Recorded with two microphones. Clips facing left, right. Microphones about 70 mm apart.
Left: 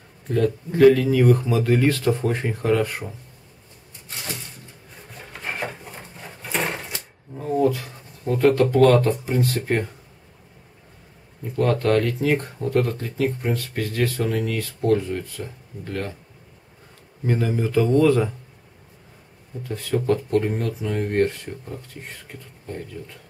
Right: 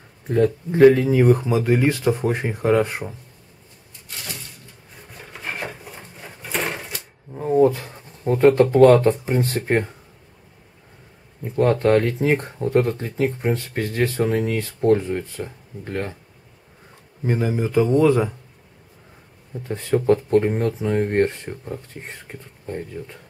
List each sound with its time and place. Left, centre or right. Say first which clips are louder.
0.3 s speech: right 3 dB; right
5.1 s sewing machine: even; centre
7.3 s speech: right 4 dB; right
11.4 s speech: right 3 dB; right
17.2 s speech: right 1 dB; centre
19.6 s speech: right 4 dB; right